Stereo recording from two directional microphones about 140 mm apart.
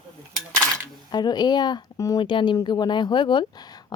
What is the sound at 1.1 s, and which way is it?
Speech, 30° left (ahead or behind).